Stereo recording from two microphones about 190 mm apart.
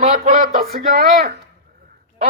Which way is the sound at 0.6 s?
55° right (ahead or behind).